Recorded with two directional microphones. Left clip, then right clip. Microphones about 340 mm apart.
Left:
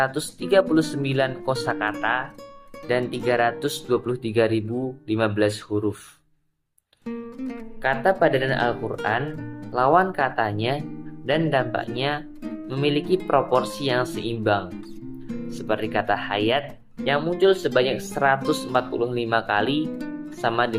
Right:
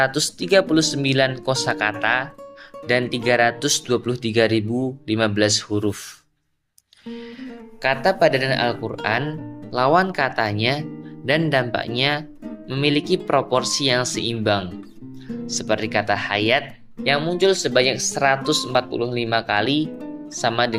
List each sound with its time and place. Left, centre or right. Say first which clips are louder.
0.0 s speech: right 4 dB; right
7.8 s speech: right 2 dB; right